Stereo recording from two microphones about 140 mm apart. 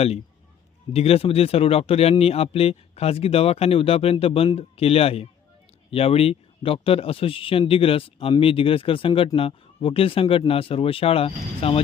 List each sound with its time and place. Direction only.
0.9 s speech: 45° left (ahead or behind)